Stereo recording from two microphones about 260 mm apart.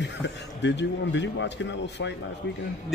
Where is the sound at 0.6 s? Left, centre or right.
Left.